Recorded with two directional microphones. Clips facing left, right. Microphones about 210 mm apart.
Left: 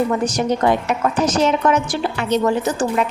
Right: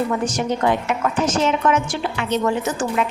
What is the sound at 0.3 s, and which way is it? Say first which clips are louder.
A woman's voice: left 3 dB; 40° left (ahead or behind).